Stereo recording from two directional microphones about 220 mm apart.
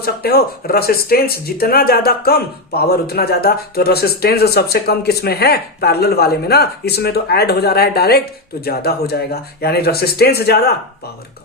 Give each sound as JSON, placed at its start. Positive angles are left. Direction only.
{"t": 0.0, "sound": "speech", "side_deg": 45}